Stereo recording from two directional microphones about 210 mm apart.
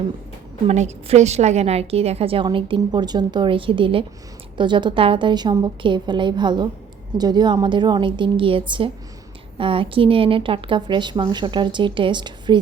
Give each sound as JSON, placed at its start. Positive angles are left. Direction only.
{"t": 0.7, "sound": "a woman's voice", "side_deg": -30}